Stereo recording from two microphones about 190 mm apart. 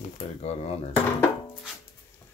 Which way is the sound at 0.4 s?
35° left (ahead or behind).